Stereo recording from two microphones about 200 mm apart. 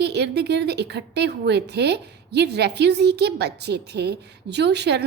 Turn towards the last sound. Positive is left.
turn(degrees=-55)  # may be behind; listen again after turning